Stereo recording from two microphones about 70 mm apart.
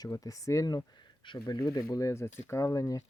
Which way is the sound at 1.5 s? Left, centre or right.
Left.